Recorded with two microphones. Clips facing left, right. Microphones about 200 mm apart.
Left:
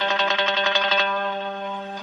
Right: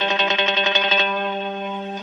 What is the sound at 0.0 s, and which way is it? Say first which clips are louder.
Music: right 2 dB; 20° right (ahead or behind).